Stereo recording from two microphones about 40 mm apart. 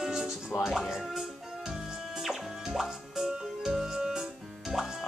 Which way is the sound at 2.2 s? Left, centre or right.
Centre.